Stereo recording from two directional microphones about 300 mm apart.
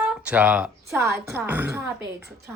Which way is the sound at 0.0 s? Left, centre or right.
Centre.